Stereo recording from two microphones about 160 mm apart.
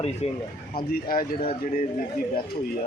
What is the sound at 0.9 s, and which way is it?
Speech, 65° left (ahead or behind).